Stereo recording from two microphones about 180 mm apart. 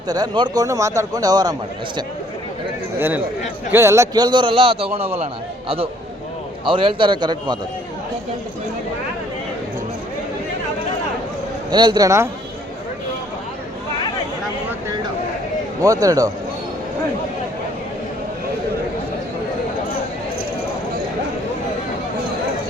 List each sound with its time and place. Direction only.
0.1 s a man's voice: 25° right (ahead or behind)
3.7 s a man's voice: 15° right (ahead or behind)
11.7 s a man's voice: 25° right (ahead or behind)
15.8 s a man's voice: 20° right (ahead or behind)